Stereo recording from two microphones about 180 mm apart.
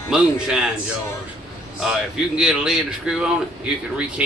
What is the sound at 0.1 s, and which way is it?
Speech, 5° right (ahead or behind).